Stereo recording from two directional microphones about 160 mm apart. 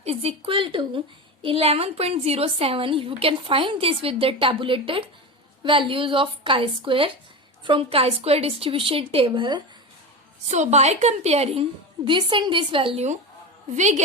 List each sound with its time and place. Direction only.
0.0 s a woman's voice: 40° right (ahead or behind)
10.5 s a woman's voice: 45° right (ahead or behind)